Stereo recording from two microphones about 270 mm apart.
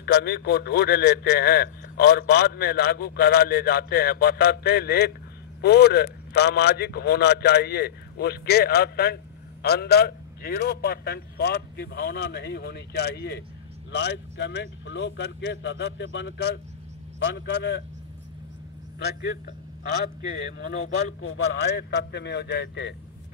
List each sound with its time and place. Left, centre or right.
0.0 s a man's voice: left
18.9 s a man's voice: left
21.2 s a man's voice: left